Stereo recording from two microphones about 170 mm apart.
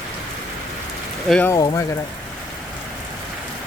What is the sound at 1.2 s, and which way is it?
Speech, 5° left (ahead or behind).